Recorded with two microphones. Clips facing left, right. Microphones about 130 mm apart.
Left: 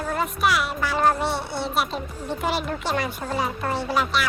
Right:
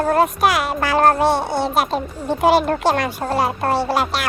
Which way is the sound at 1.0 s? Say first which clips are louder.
Right 7 dB; 80° right.